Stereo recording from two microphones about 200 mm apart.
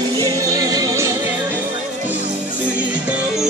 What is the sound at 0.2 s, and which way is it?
Music, 20° right (ahead or behind).